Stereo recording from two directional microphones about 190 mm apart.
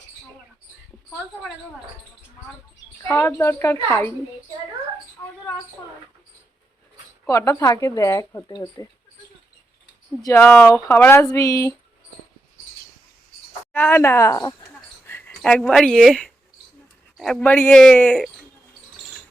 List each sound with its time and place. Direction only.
3.0 s speech: 10° left (ahead or behind)
7.3 s speech: 15° left (ahead or behind)
10.2 s speech: 15° left (ahead or behind)
13.7 s speech: 10° left (ahead or behind)
14.8 s a sound: 10° left (ahead or behind)
17.2 s speech: centre (ahead or behind)